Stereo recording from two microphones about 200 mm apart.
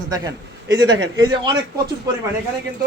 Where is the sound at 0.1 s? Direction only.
20° right (ahead or behind).